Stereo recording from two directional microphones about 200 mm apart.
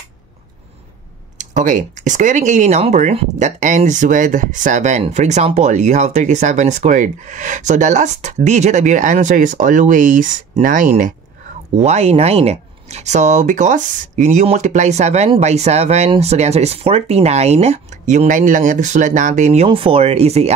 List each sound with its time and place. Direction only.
1.4 s speech: 40° right (ahead or behind)